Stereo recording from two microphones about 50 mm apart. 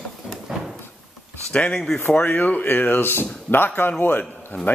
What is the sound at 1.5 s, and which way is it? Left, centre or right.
Speech, left.